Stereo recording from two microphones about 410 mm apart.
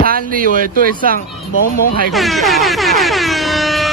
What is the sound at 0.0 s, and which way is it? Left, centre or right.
Speech, right.